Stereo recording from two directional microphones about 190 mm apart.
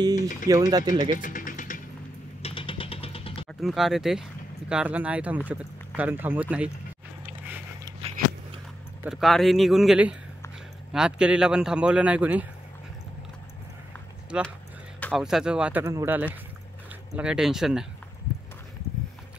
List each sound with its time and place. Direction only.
0.5 s speech: 20° right (ahead or behind)
1.1 s vehicle: 45° left (ahead or behind)
2.4 s vehicle: 30° left (ahead or behind)
3.6 s speech: centre (ahead or behind)
7.2 s biting: 10° right (ahead or behind)
9.0 s speech: centre (ahead or behind)
14.3 s speech: 5° right (ahead or behind)